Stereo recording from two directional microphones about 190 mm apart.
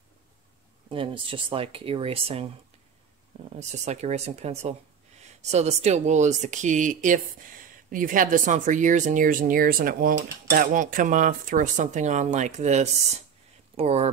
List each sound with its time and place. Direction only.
0.8 s speech: 25° right (ahead or behind)
3.5 s speech: 35° right (ahead or behind)